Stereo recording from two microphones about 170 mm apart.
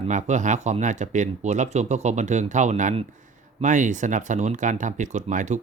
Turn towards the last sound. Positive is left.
turn(degrees=-45)  # may be behind; listen again after turning